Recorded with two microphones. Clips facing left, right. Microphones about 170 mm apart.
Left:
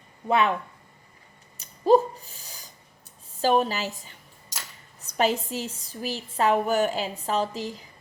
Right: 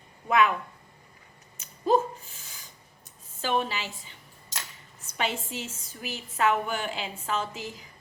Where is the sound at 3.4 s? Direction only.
40° left (ahead or behind).